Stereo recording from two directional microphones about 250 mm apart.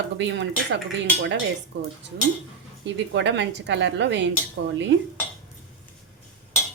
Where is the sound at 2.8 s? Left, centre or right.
Right.